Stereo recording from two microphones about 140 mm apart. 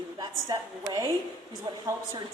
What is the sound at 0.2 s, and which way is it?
A woman's voice, 30° right (ahead or behind).